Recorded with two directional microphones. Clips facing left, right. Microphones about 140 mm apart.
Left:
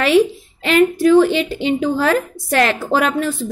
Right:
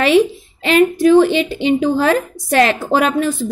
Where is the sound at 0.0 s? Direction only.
20° right (ahead or behind).